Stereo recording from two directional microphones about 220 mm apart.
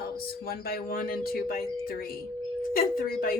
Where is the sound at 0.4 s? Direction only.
45° left (ahead or behind).